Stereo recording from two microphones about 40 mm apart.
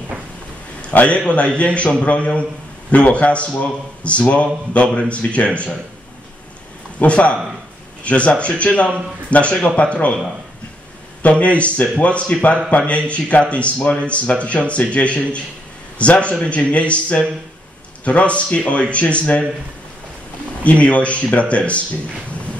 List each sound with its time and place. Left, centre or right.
0.8 s speech: left
7.0 s speech: left
11.2 s speech: left
20.6 s speech: left